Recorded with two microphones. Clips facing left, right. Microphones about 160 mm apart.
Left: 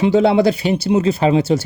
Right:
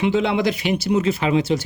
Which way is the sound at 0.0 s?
35° left (ahead or behind).